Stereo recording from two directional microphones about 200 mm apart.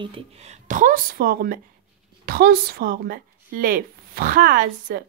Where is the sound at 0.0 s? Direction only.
30° right (ahead or behind).